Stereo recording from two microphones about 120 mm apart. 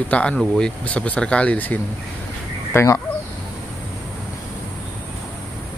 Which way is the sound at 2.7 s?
25° left (ahead or behind).